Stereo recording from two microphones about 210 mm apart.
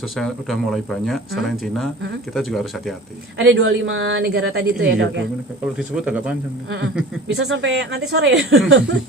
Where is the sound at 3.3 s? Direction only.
70° right (ahead or behind).